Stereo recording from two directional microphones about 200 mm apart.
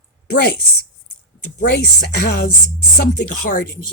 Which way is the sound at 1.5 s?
50° left (ahead or behind).